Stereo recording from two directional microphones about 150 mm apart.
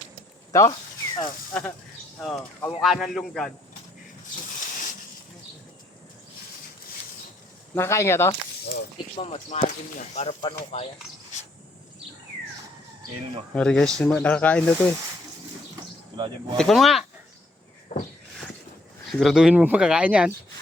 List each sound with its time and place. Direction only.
0.5 s speech: 25° left (ahead or behind)
1.5 s speech: 5° left (ahead or behind)
7.8 s speech: 20° left (ahead or behind)
9.1 s speech: 45° left (ahead or behind)
13.5 s speech: 5° left (ahead or behind)
16.1 s speech: 30° right (ahead or behind)
16.6 s speech: centre (ahead or behind)
17.9 s a sound: 40° left (ahead or behind)
19.1 s speech: centre (ahead or behind)